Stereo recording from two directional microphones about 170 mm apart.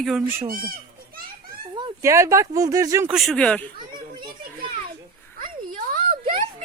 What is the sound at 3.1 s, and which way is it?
Speech, centre (ahead or behind).